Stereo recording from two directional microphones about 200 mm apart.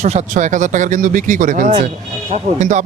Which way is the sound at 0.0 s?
35° right (ahead or behind).